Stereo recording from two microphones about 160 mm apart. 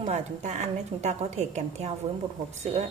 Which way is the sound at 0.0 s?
45° right (ahead or behind).